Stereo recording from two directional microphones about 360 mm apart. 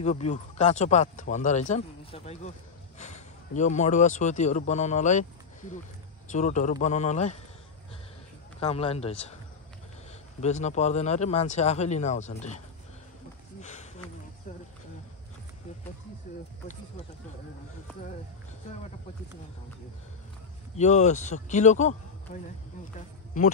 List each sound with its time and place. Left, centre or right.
0.0 s speech: centre
6.3 s speech: left
8.5 s speech: centre
10.4 s speech: centre
13.6 s a sound: centre
20.7 s speech: centre
22.9 s speech: left